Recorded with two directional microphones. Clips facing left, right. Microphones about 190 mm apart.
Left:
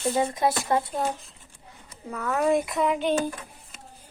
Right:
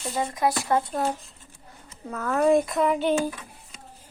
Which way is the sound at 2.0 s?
5° left (ahead or behind).